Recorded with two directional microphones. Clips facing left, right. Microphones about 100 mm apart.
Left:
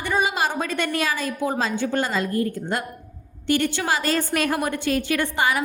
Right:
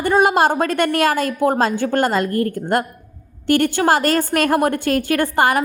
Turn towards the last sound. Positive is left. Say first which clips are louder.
# right 6 dB
turn(degrees=-50)  # may be behind; listen again after turning